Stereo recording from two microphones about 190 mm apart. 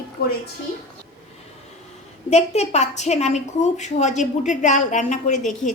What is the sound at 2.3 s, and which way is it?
A woman's voice, 35° left (ahead or behind).